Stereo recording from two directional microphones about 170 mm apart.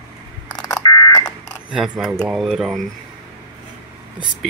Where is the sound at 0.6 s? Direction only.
20° left (ahead or behind).